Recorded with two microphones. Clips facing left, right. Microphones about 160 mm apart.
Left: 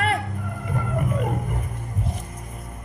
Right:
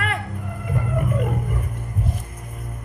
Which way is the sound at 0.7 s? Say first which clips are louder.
Right 2 dB; 50° right (ahead or behind).